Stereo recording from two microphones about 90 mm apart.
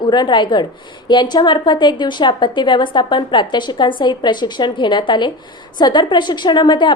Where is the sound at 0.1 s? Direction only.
55° left (ahead or behind).